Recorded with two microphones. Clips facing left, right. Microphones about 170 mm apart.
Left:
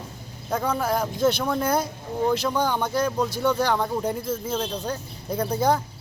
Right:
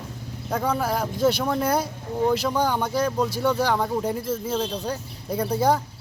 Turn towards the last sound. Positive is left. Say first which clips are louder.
# right 1 dB
turn(degrees=-10)  # may be behind; listen again after turning